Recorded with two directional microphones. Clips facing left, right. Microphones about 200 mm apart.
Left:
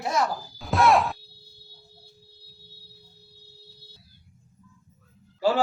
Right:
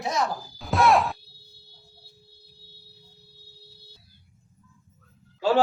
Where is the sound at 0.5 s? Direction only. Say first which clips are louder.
Even; centre (ahead or behind).